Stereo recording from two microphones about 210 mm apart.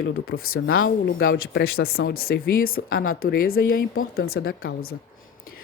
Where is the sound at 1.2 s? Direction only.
45° left (ahead or behind).